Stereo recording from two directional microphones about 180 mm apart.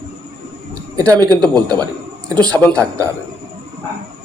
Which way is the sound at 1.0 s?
20° right (ahead or behind).